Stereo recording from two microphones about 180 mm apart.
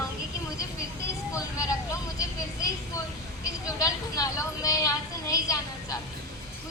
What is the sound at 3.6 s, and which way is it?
A woman's voice, 20° left (ahead or behind).